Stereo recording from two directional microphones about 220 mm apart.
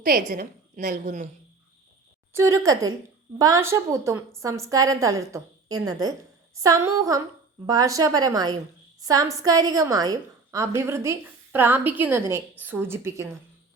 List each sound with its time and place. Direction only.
0.0 s a woman's voice: 40° right (ahead or behind)
2.3 s a woman's voice: 15° right (ahead or behind)